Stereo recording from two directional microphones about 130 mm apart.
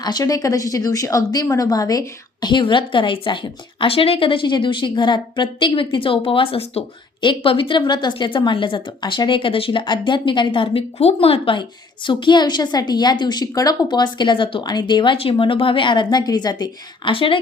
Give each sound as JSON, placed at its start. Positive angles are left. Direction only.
{"t": 0.0, "sound": "a woman's voice", "side_deg": 30}
{"t": 17.1, "sound": "a woman's voice", "side_deg": 40}